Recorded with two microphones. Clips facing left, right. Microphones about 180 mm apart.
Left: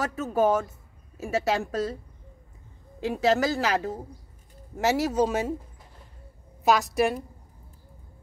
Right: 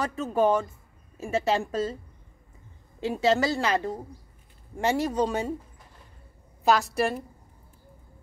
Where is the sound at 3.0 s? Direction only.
Centre (ahead or behind).